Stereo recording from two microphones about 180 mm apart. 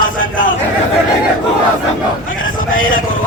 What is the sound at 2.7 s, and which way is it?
Speech, 50° left (ahead or behind).